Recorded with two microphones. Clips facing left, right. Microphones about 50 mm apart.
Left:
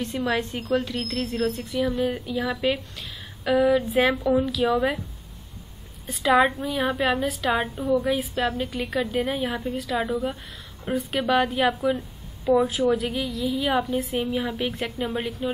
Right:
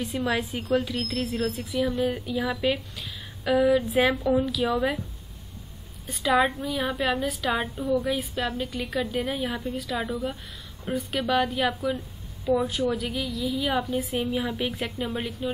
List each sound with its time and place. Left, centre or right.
0.0 s a woman's voice: centre
6.0 s a woman's voice: centre